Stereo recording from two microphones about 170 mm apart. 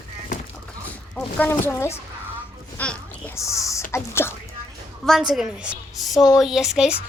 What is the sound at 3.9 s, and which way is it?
Speech, 15° left (ahead or behind).